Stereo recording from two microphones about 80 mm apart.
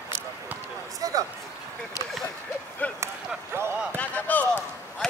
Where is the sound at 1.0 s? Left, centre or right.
Right.